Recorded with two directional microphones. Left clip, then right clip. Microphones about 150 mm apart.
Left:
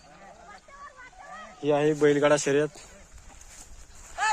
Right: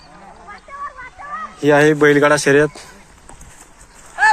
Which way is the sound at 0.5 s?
35° left (ahead or behind).